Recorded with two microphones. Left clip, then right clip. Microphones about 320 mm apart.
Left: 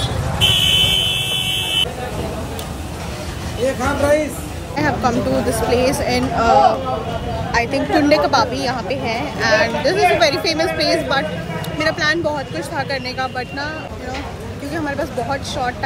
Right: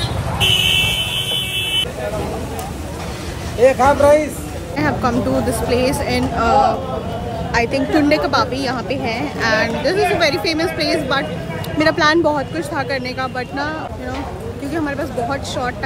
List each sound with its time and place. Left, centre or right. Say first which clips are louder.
0.4 s buzzer: even; left
3.5 s a woman's voice: right 8 dB; centre
14.7 s a woman's voice: even; centre